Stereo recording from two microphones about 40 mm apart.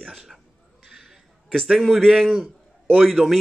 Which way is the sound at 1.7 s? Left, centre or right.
Centre.